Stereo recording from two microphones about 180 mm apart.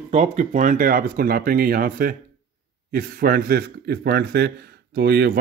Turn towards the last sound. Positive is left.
turn(degrees=-65)  # may be behind; listen again after turning